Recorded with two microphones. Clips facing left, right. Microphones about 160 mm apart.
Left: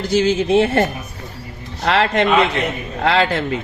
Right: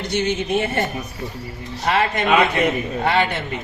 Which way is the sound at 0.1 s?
90° left.